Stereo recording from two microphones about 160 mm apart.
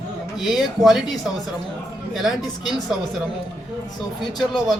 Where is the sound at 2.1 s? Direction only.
Centre (ahead or behind).